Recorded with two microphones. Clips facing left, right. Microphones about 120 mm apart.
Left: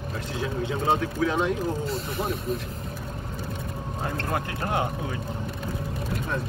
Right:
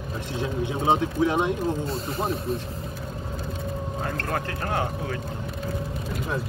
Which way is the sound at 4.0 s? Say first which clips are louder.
Left 1 dB; 20° left (ahead or behind).